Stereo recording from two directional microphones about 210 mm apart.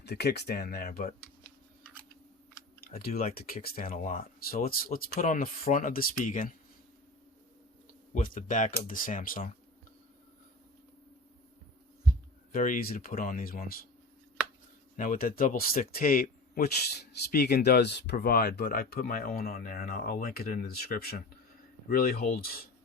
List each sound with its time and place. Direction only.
0.0 s speech: 50° left (ahead or behind)
2.8 s typing: 45° left (ahead or behind)
3.2 s speech: 45° left (ahead or behind)
8.1 s speech: 40° left (ahead or behind)
12.5 s speech: 40° left (ahead or behind)
14.9 s speech: 40° left (ahead or behind)